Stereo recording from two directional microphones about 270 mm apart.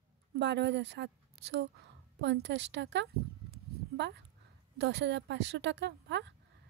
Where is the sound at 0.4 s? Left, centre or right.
Right.